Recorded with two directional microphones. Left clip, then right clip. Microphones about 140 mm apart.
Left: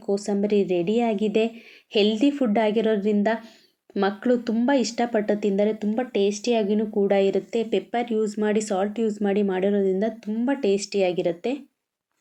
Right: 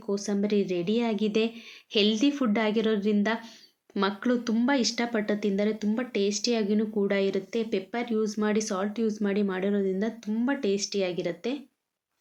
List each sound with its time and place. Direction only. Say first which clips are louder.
0.1 s speech: left 5 dB; 15° left (ahead or behind)